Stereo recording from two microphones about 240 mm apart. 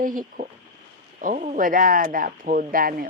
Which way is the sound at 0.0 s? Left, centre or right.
Right.